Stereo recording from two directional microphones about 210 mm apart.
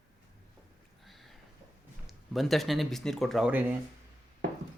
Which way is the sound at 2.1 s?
Centre (ahead or behind).